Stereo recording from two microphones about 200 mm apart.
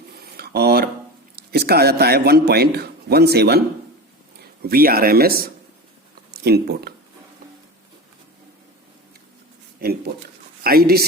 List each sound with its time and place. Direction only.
0.2 s dishes: 55° right (ahead or behind)
1.4 s a man's voice: 50° right (ahead or behind)
4.6 s a man's voice: 50° right (ahead or behind)
10.6 s speech: 50° right (ahead or behind)